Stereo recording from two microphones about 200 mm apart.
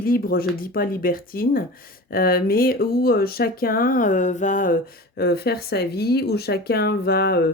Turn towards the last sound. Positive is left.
turn(degrees=55)  # may be behind; listen again after turning